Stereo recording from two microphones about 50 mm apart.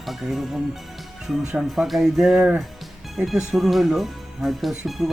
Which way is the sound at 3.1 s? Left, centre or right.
Centre.